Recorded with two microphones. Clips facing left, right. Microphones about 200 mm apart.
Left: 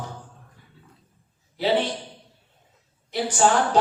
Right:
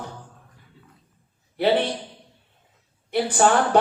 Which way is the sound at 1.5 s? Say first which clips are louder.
Right 2 dB; 60° right (ahead or behind).